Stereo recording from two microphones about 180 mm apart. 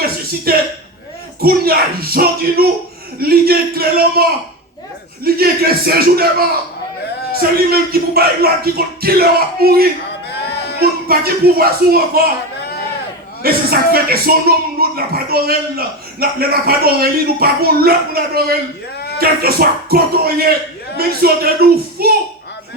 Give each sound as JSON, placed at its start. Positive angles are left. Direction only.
{"t": 0.5, "sound": "speech", "side_deg": -60}
{"t": 7.3, "sound": "speech", "side_deg": -60}
{"t": 10.2, "sound": "livestock", "side_deg": 65}
{"t": 10.8, "sound": "speech", "side_deg": -60}
{"t": 13.4, "sound": "speech", "side_deg": -60}